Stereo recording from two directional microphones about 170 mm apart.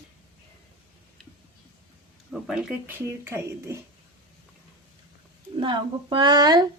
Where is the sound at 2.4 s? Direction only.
5° right (ahead or behind).